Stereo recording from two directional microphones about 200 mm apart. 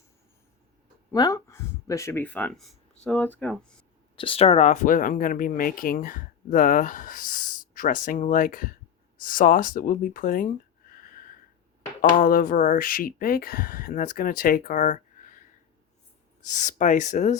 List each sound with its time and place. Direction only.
1.1 s speech: 20° left (ahead or behind)
4.2 s speech: 30° left (ahead or behind); by 10.5 s 45° left (ahead or behind)
12.1 s speech: 45° left (ahead or behind)